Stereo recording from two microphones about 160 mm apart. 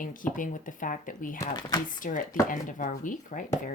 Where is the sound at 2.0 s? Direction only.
60° left (ahead or behind).